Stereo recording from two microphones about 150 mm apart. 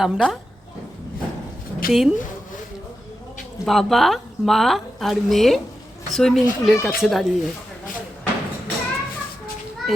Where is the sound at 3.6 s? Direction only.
Centre (ahead or behind).